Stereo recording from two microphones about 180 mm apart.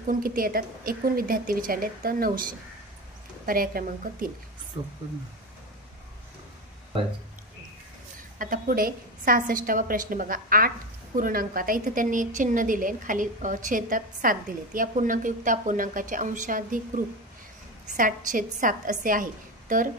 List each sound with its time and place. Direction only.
0.0 s a woman's voice: 50° right (ahead or behind)
3.4 s a woman's voice: 55° right (ahead or behind)
4.7 s speech: 30° right (ahead or behind)
8.4 s a woman's voice: 50° right (ahead or behind)